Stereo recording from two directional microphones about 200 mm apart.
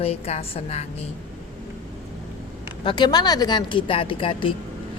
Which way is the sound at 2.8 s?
25° left (ahead or behind).